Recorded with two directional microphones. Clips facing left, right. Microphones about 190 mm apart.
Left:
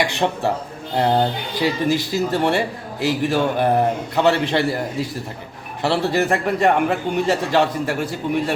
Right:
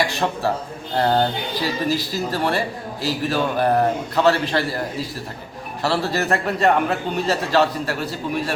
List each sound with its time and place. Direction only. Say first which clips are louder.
0.9 s a man's voice: left 1 dB; 15° left (ahead or behind)